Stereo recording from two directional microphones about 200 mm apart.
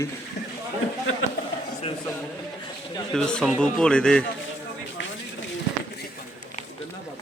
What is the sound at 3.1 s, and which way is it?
Speech, 5° left (ahead or behind).